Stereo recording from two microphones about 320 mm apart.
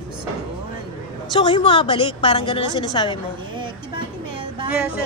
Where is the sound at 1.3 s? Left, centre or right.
Centre.